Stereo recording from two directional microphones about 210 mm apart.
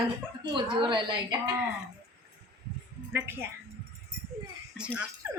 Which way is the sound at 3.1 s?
10° right (ahead or behind).